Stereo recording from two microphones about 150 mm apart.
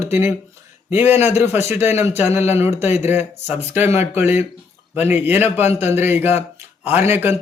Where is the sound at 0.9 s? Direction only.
15° right (ahead or behind).